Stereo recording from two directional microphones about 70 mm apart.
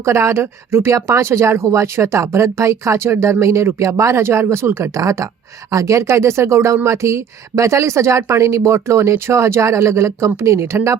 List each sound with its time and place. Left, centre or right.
0.0 s speech: right
4.9 s speech: right